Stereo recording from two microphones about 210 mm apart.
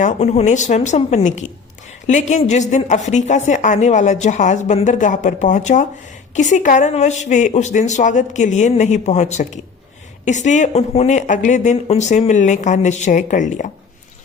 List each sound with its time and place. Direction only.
0.0 s a woman's voice: 30° left (ahead or behind)